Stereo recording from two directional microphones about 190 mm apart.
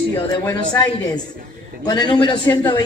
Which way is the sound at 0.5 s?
20° left (ahead or behind).